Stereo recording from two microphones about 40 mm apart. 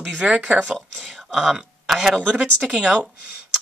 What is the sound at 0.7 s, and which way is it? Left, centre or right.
Speech, centre.